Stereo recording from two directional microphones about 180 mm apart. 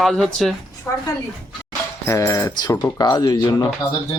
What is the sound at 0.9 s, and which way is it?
Speech, 20° left (ahead or behind).